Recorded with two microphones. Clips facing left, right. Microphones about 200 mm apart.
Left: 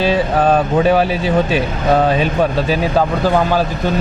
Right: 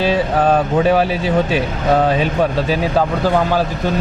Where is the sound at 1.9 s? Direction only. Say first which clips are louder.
Left 1 dB; 25° left (ahead or behind).